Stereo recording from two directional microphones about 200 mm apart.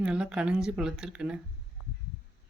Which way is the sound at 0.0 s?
5° right (ahead or behind).